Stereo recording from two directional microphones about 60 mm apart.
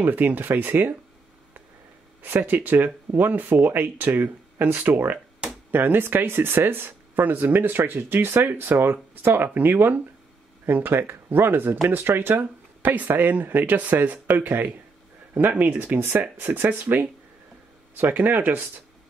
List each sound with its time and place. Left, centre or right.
0.0 s speech: right
2.2 s speech: right
12.9 s speech: right
18.1 s speech: right